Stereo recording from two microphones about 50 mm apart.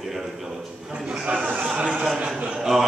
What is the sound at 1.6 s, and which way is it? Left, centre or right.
Speech, centre.